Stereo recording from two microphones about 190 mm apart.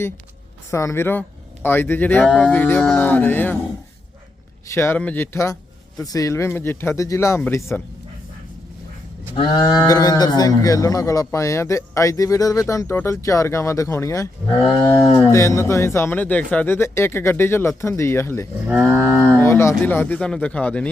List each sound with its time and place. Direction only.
0.7 s speech: 15° left (ahead or behind)
4.7 s speech: 10° left (ahead or behind)
9.3 s speech: 25° left (ahead or behind)
18.7 s cattle: 10° right (ahead or behind)
19.3 s speech: 15° left (ahead or behind)